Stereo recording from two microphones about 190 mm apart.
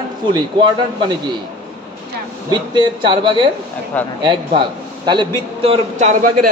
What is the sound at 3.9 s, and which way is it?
Speech, 10° left (ahead or behind).